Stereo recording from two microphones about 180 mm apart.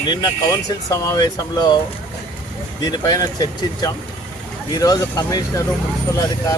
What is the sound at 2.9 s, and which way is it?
Speech, 20° left (ahead or behind).